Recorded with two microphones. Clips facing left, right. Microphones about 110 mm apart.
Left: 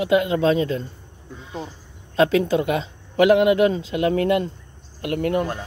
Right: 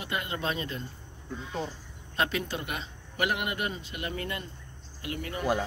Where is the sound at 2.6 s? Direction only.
90° left.